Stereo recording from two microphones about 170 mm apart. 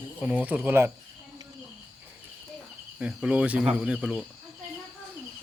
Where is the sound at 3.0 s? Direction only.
5° right (ahead or behind).